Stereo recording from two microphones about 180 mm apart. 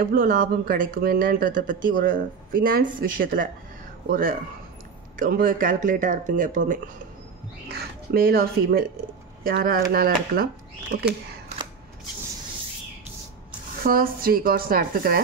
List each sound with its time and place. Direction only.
0.0 s speech: 50° right (ahead or behind)
7.6 s speech: 60° right (ahead or behind)
13.8 s speech: 55° right (ahead or behind)